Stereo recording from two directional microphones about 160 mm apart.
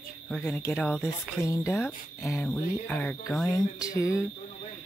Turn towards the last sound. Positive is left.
turn(degrees=20)  # may be behind; listen again after turning